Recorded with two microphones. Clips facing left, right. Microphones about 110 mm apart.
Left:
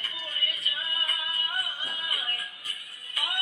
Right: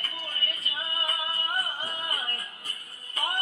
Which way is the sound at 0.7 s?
30° right (ahead or behind).